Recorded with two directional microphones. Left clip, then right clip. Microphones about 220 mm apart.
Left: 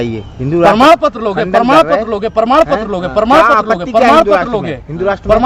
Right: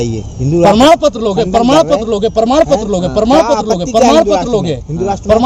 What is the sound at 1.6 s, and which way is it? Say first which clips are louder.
Speech: left 2 dB; 25° left (ahead or behind).